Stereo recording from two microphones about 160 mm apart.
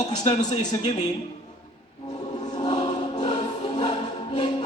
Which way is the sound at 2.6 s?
25° left (ahead or behind).